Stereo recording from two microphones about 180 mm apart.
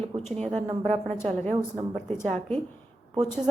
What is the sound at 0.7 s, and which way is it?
Speech, 35° right (ahead or behind).